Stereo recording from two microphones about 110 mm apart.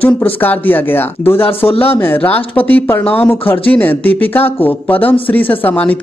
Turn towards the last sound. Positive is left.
turn(degrees=15)  # may be behind; listen again after turning